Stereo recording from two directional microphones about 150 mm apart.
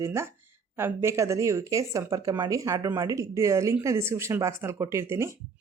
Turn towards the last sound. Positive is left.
turn(degrees=-15)  # may be behind; listen again after turning